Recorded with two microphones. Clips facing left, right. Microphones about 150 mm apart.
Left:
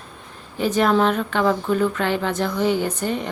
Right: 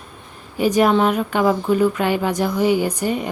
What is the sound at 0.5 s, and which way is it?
A woman's voice, 10° right (ahead or behind).